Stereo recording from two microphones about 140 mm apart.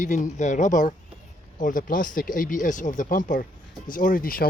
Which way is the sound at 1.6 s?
75° left (ahead or behind).